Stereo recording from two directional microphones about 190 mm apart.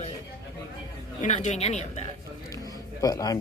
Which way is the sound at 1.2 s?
35° left (ahead or behind).